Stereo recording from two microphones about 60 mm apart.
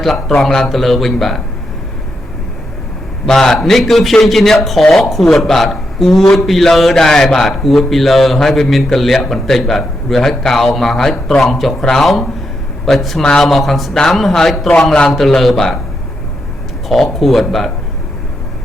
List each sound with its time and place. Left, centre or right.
0.0 s a man's voice: centre
3.2 s a man's voice: centre
16.9 s a man's voice: centre